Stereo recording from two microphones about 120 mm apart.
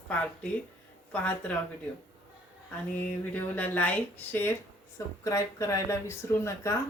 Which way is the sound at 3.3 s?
15° left (ahead or behind).